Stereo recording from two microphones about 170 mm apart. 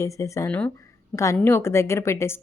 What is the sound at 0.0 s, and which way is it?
Speech, 20° left (ahead or behind).